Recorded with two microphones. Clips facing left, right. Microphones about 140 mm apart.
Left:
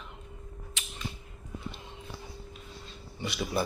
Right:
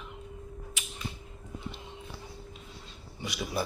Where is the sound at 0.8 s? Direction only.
10° right (ahead or behind).